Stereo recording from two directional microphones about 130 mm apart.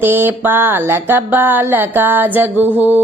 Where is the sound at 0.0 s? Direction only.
15° right (ahead or behind).